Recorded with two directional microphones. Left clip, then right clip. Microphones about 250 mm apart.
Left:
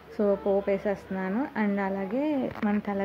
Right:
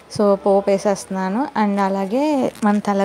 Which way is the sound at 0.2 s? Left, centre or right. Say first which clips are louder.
Right 10 dB; right.